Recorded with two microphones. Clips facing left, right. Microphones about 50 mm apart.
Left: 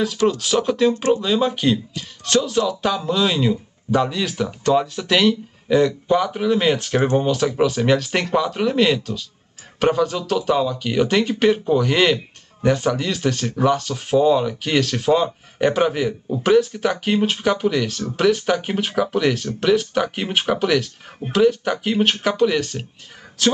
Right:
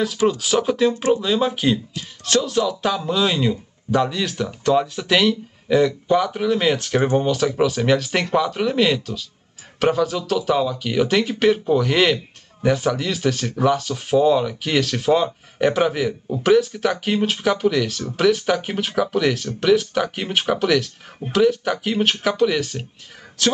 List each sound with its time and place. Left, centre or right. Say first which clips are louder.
0.0 s speech: even; centre